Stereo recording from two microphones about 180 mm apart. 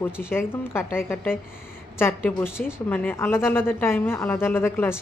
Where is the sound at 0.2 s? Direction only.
15° left (ahead or behind).